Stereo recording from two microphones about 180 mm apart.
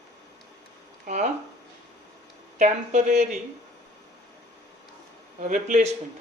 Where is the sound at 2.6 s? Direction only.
40° right (ahead or behind).